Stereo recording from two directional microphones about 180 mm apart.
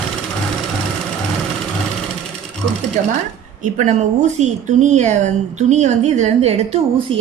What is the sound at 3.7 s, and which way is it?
Speech, 40° right (ahead or behind).